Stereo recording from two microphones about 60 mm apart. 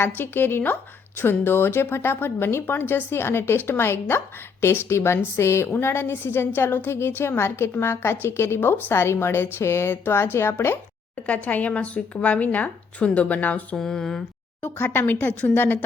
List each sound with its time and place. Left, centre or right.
0.0 s a woman's voice: left
11.3 s a woman's voice: left
13.7 s speech: centre
14.6 s a woman's voice: left